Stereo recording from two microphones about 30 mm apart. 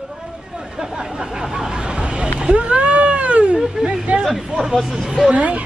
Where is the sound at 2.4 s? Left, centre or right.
Right.